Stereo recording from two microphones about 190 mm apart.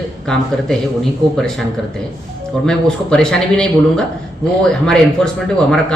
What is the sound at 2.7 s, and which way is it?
Speech, 5° left (ahead or behind).